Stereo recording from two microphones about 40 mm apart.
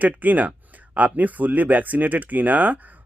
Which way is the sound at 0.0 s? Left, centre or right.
Right.